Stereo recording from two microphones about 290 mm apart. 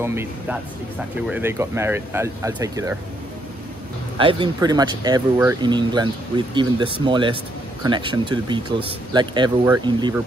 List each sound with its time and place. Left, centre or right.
0.0 s speech: centre
4.2 s speech: centre